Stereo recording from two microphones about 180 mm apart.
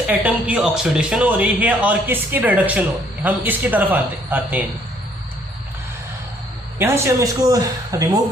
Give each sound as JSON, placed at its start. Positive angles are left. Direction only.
{"t": 0.1, "sound": "speech", "side_deg": -10}
{"t": 6.7, "sound": "speech", "side_deg": -15}